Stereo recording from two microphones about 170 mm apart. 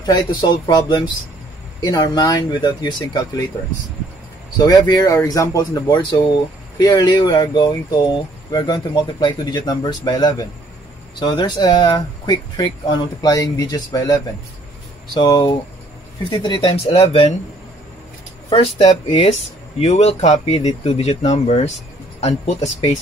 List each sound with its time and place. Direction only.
0.0 s speech: 25° left (ahead or behind)
4.6 s speech: 25° left (ahead or behind)
18.5 s speech: 35° left (ahead or behind)